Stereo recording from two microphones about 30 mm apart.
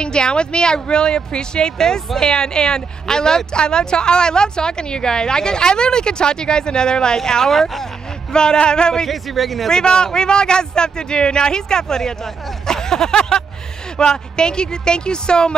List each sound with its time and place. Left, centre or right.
0.0 s speech: left; by 7.9 s centre
8.3 s speech: left
9.1 s a man's voice: centre
9.7 s speech: left
12.6 s a sound: centre
13.9 s speech: left